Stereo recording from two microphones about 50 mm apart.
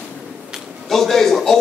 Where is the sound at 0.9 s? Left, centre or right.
Centre.